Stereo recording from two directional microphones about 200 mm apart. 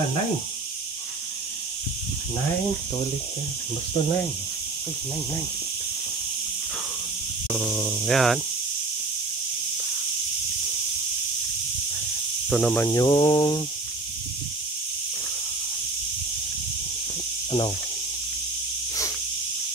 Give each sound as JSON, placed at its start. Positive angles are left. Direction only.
{"t": 7.5, "sound": "mantra", "side_deg": 0}
{"t": 12.4, "sound": "mantra", "side_deg": 0}
{"t": 13.0, "sound": "a sound", "side_deg": 25}
{"t": 17.5, "sound": "speech", "side_deg": 25}